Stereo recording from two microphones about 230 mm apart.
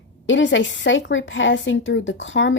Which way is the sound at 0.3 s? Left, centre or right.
Left.